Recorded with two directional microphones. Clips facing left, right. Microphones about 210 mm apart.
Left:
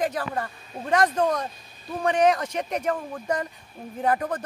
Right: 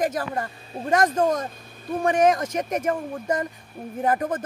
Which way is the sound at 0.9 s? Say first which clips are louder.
Right 1 dB; 45° right (ahead or behind).